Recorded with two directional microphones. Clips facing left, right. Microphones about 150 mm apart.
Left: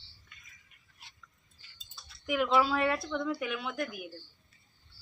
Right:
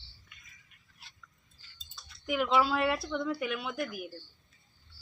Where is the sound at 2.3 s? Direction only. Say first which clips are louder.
Even; centre (ahead or behind).